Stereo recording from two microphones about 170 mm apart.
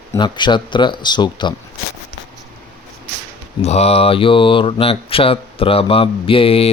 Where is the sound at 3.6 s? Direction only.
40° left (ahead or behind).